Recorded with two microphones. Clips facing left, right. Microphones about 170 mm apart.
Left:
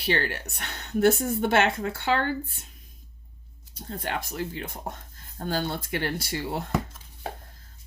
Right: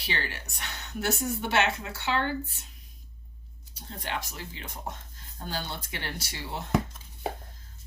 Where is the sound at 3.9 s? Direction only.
50° left (ahead or behind).